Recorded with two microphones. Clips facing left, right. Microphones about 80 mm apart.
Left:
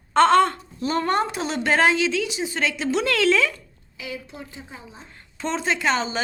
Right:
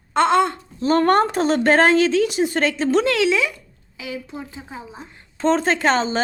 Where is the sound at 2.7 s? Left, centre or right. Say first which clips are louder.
Right 5 dB; right.